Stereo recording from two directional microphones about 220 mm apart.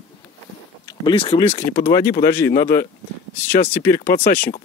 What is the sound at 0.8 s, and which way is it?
Speech, 20° left (ahead or behind).